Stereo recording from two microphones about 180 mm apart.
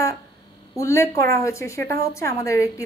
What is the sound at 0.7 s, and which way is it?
A woman's voice, 15° left (ahead or behind).